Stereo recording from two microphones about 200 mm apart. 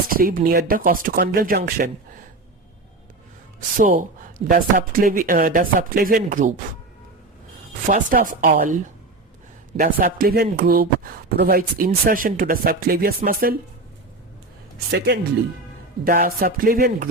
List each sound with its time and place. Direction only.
0.1 s speech: 45° right (ahead or behind)
3.8 s speech: 45° right (ahead or behind)
7.9 s speech: 45° right (ahead or behind)
9.7 s speech: 45° right (ahead or behind)
14.8 s speech: 55° right (ahead or behind)
16.0 s speech: 45° right (ahead or behind)